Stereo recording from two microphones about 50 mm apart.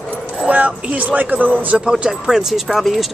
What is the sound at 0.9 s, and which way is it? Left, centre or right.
Speech, right.